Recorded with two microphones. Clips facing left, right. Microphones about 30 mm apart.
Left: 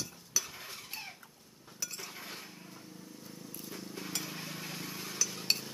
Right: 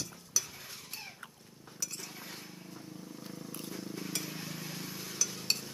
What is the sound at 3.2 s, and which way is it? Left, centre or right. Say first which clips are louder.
Vehicle: right 4 dB; right.